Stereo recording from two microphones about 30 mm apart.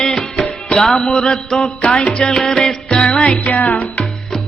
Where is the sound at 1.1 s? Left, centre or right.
Left.